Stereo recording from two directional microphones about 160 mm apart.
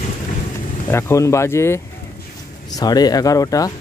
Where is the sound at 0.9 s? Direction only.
20° left (ahead or behind).